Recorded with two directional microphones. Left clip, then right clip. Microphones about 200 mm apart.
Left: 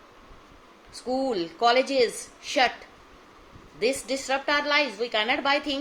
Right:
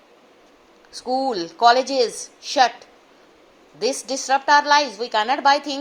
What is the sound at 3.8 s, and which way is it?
A woman's voice, 20° right (ahead or behind).